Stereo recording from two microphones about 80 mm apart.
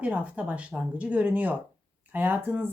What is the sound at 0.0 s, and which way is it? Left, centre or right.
A woman's voice, centre.